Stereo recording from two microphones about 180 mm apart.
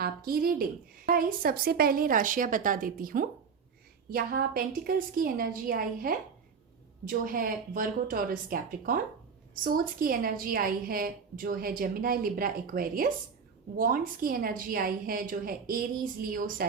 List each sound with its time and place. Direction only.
0.0 s a woman's voice: 55° right (ahead or behind)